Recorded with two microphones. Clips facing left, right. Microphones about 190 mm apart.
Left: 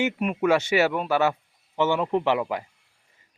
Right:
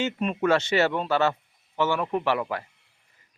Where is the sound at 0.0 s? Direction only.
10° left (ahead or behind).